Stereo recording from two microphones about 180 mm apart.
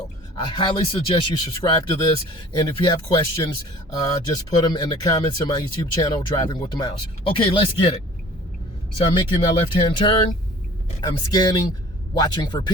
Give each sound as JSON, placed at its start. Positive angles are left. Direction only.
{"t": 0.5, "sound": "speech", "side_deg": 30}
{"t": 9.0, "sound": "speech", "side_deg": 25}
{"t": 11.0, "sound": "speech", "side_deg": 20}